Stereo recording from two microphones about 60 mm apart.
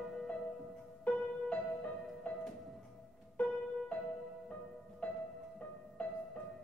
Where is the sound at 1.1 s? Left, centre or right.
Left.